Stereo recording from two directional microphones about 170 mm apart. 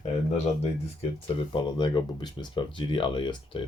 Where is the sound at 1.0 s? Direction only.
30° left (ahead or behind).